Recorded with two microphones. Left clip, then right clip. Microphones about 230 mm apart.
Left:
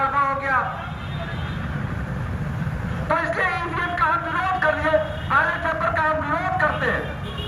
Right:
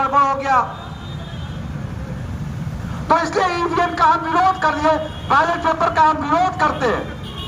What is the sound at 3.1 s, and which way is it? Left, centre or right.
A man's voice, right.